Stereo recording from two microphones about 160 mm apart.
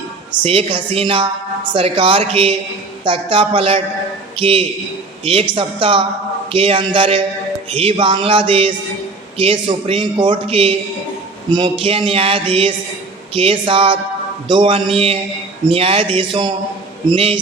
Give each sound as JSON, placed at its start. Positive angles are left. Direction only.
{"t": 0.4, "sound": "speech", "side_deg": -35}